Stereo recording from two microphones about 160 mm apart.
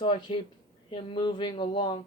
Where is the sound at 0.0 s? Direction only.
30° left (ahead or behind).